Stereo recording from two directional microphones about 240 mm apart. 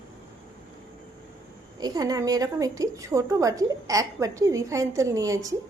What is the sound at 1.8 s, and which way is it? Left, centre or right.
A woman's voice, centre.